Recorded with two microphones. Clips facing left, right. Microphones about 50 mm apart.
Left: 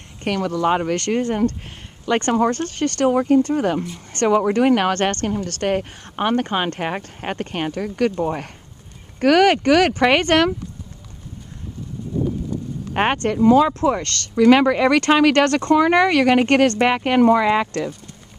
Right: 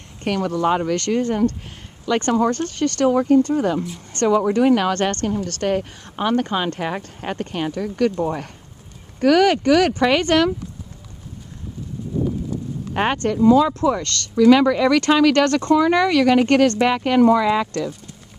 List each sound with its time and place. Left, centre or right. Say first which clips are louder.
0.2 s speech: even; left
9.2 s speech: left 1 dB; left
12.9 s speech: left 1 dB; left